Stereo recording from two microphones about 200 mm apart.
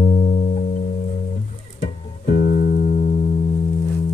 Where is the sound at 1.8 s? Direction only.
35° left (ahead or behind).